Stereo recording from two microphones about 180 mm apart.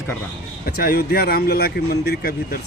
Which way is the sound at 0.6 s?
60° left (ahead or behind).